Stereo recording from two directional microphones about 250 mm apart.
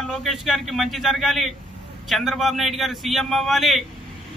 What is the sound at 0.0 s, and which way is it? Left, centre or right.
A man's voice, centre.